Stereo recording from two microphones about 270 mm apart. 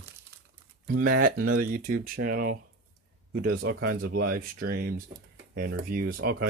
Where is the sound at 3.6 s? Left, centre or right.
Right.